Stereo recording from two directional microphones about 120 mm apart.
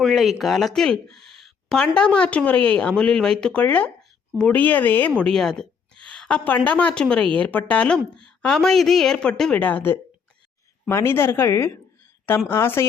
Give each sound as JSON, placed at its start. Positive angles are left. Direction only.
{"t": 0.0, "sound": "a woman's voice", "side_deg": 0}